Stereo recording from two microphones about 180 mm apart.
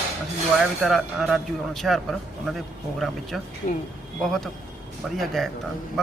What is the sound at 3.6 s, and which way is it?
Speech, 50° left (ahead or behind).